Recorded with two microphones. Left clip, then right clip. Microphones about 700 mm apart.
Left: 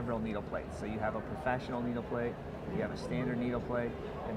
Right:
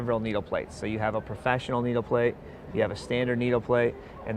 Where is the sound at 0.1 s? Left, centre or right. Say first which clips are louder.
Right 10 dB; right.